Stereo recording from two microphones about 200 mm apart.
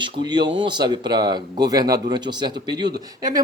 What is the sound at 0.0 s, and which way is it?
Speech, 20° right (ahead or behind).